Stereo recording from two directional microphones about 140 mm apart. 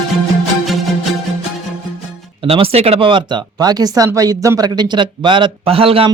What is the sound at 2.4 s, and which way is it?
Speech, 40° right (ahead or behind).